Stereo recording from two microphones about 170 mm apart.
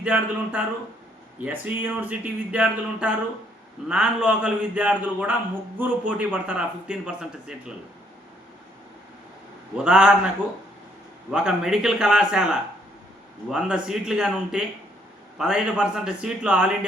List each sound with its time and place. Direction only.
0.0 s a man's voice: 10° right (ahead or behind)
9.7 s a man's voice: 5° right (ahead or behind)
11.3 s a man's voice: 5° right (ahead or behind)
13.5 s a man's voice: 5° right (ahead or behind)